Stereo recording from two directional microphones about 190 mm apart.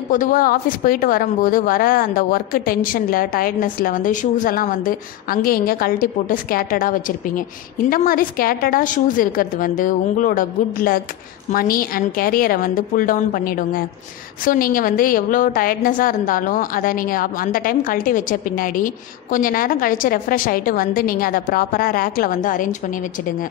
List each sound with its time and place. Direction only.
0.1 s a woman's voice: 45° left (ahead or behind)